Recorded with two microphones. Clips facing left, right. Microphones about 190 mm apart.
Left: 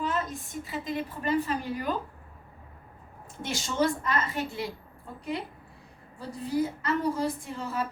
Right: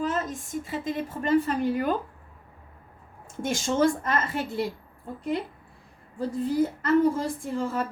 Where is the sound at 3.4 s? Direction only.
45° right (ahead or behind).